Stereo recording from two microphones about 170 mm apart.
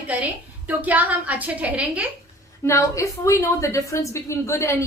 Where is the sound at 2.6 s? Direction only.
15° left (ahead or behind).